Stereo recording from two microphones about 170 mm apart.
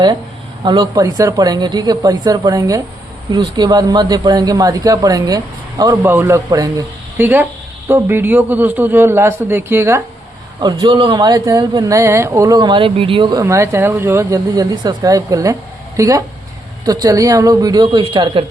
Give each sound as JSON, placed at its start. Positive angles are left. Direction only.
{"t": 0.6, "sound": "a man's voice", "side_deg": -25}
{"t": 13.4, "sound": "speech", "side_deg": -15}